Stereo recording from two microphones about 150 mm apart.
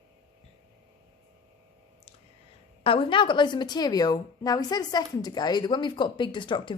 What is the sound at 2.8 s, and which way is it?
A woman's voice, 35° left (ahead or behind).